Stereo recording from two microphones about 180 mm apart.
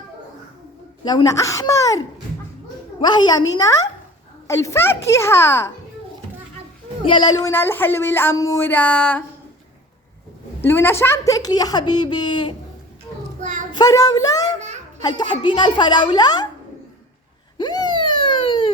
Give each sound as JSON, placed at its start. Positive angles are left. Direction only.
{"t": 1.0, "sound": "a woman's voice", "side_deg": 25}
{"t": 3.6, "sound": "a sound", "side_deg": 20}
{"t": 7.1, "sound": "a sound", "side_deg": 25}
{"t": 10.6, "sound": "a woman's voice", "side_deg": 10}
{"t": 13.4, "sound": "child singing", "side_deg": -45}
{"t": 13.7, "sound": "a woman's voice", "side_deg": 20}
{"t": 14.6, "sound": "children playing", "side_deg": -40}
{"t": 15.0, "sound": "a woman's voice", "side_deg": 25}
{"t": 17.6, "sound": "a sound", "side_deg": 25}